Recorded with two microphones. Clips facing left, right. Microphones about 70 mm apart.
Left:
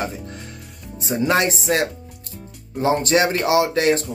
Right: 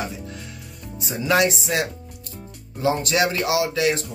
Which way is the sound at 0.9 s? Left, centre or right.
Left.